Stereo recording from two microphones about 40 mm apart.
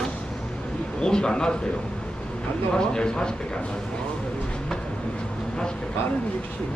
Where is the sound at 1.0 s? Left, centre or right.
Left.